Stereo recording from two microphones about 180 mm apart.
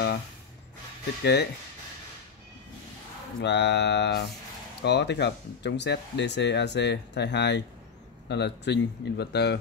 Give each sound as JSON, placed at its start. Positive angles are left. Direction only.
{"t": 1.2, "sound": "speech", "side_deg": 65}
{"t": 3.3, "sound": "speech", "side_deg": 70}